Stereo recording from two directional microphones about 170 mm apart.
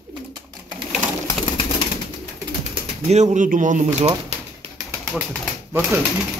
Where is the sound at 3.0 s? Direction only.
40° right (ahead or behind).